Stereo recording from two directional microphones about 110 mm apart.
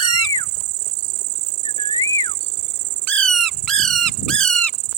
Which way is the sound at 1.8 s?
35° left (ahead or behind).